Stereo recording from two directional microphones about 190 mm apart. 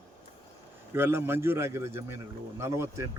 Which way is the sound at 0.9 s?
10° right (ahead or behind).